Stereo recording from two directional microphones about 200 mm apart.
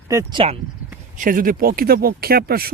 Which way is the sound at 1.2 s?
45° right (ahead or behind).